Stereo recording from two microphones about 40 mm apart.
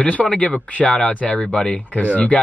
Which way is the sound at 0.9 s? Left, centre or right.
Centre.